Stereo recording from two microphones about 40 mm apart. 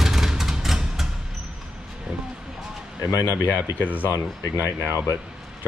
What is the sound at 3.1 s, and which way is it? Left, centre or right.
Speech, right.